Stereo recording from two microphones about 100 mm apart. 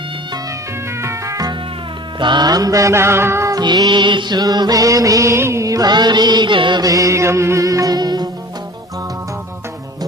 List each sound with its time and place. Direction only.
1.0 s music: 30° right (ahead or behind)
2.1 s music: 50° right (ahead or behind); by 3.6 s 30° right (ahead or behind)
3.6 s music: 45° right (ahead or behind)
6.8 s music: 35° right (ahead or behind)